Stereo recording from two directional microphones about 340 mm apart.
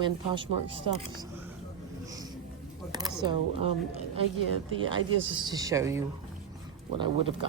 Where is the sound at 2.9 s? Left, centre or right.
Centre.